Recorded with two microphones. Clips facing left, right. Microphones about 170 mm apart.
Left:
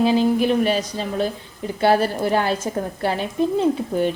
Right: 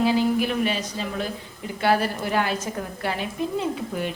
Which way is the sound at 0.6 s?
40° left (ahead or behind).